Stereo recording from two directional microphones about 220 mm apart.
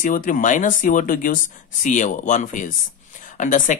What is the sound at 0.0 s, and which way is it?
Speech, 40° left (ahead or behind).